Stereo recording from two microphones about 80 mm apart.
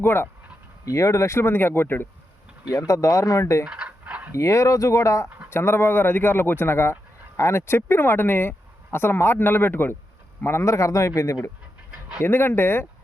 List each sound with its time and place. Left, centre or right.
0.0 s speech: left
0.9 s speech: left
2.7 s speech: left
3.7 s a sound: centre
4.4 s speech: left
5.5 s speech: left
12.2 s speech: left